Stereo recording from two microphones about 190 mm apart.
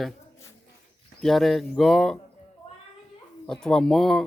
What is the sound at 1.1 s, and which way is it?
Speech, centre (ahead or behind).